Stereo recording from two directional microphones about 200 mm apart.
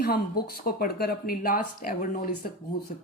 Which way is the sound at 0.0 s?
50° left (ahead or behind).